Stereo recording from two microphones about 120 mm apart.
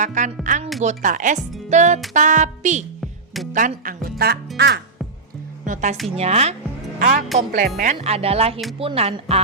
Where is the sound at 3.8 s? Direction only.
90° right.